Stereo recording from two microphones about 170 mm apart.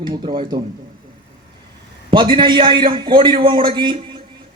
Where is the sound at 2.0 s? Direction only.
30° right (ahead or behind).